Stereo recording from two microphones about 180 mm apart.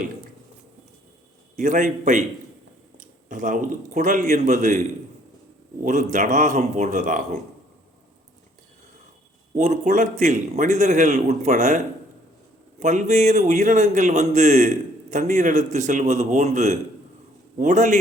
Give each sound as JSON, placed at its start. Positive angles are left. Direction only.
{"t": 1.5, "sound": "a man's voice", "side_deg": -45}
{"t": 3.2, "sound": "a man's voice", "side_deg": -45}
{"t": 5.8, "sound": "a man's voice", "side_deg": -45}
{"t": 9.6, "sound": "a man's voice", "side_deg": -45}
{"t": 12.8, "sound": "a man's voice", "side_deg": -40}